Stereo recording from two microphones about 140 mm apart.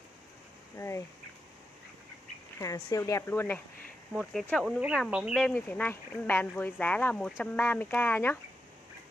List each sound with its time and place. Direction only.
0.7 s speech: 20° left (ahead or behind)
2.6 s speech: 25° left (ahead or behind); by 5.5 s 5° right (ahead or behind)
5.5 s speech: 15° left (ahead or behind)